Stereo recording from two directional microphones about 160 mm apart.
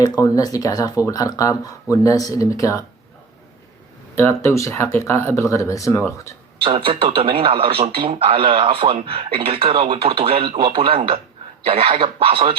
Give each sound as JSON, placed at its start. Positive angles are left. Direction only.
{"t": 0.2, "sound": "speech", "side_deg": 20}
{"t": 4.1, "sound": "speech", "side_deg": 15}
{"t": 6.6, "sound": "speech", "side_deg": -35}